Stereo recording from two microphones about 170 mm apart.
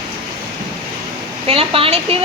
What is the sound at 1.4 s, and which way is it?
Speech, 35° right (ahead or behind).